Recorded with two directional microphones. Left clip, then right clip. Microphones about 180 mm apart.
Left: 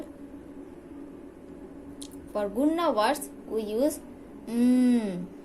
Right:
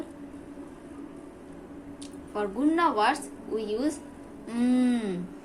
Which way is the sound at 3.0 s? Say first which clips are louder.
Right 1 dB; 45° left (ahead or behind).